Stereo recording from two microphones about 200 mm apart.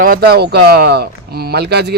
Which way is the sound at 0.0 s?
45° right (ahead or behind).